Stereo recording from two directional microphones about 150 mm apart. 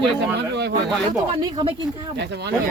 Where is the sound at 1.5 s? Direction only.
35° right (ahead or behind).